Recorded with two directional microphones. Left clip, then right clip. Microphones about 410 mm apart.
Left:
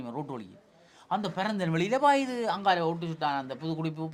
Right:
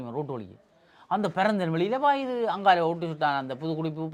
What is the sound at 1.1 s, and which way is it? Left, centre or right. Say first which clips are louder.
Speech: right 5 dB; right.